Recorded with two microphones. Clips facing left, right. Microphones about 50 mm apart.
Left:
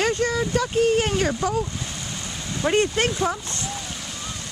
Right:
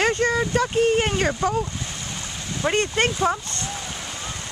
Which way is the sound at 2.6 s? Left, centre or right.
Centre.